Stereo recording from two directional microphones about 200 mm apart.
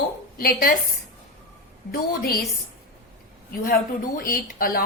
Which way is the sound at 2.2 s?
50° left (ahead or behind).